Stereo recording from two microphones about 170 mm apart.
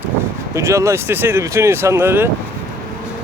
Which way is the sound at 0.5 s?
15° right (ahead or behind).